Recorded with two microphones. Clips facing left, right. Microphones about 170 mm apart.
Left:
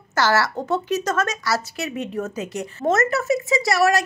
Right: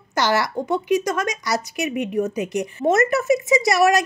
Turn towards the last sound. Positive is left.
turn(degrees=-20)  # may be behind; listen again after turning